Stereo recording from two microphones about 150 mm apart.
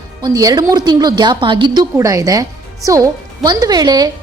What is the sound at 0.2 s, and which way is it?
A woman's voice, 25° right (ahead or behind).